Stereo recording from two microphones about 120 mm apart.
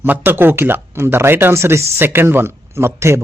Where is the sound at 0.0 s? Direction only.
15° right (ahead or behind).